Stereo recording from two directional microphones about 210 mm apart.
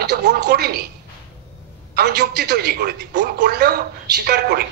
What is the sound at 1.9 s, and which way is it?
Speech, 50° right (ahead or behind).